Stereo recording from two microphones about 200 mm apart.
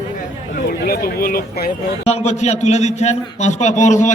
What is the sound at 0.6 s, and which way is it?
Speech, 50° left (ahead or behind).